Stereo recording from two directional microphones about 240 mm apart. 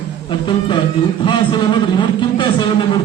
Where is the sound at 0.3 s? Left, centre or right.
Centre.